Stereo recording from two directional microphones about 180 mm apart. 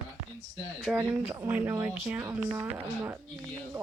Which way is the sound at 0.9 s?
5° right (ahead or behind).